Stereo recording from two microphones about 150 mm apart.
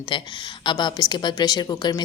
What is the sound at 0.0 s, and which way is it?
A woman's voice, 30° left (ahead or behind).